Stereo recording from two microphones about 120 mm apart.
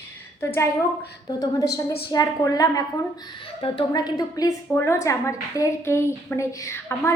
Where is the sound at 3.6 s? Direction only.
45° left (ahead or behind).